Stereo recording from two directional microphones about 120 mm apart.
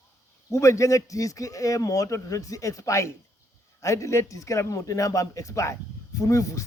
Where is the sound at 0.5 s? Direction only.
25° left (ahead or behind).